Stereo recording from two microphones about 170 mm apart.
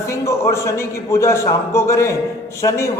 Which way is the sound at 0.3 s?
15° left (ahead or behind).